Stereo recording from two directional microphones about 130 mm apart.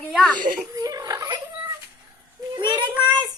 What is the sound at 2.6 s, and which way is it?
Speech, 35° right (ahead or behind).